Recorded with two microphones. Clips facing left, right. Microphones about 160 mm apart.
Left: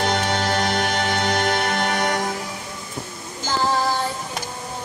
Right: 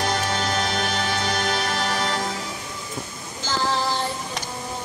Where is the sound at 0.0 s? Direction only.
65° left (ahead or behind).